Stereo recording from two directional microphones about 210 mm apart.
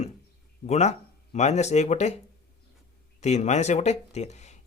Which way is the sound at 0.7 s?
30° left (ahead or behind).